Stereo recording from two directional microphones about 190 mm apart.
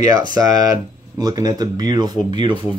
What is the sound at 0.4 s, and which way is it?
Speech, 20° right (ahead or behind).